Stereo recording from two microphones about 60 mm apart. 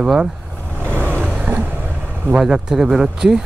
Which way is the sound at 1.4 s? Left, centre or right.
Right.